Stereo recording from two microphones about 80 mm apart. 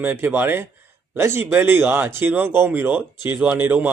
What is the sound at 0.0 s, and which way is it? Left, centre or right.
Speech, right.